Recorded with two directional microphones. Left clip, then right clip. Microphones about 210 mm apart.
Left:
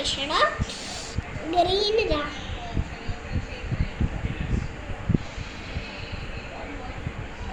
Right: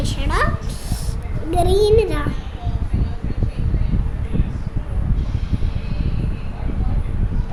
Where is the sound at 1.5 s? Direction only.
90° right.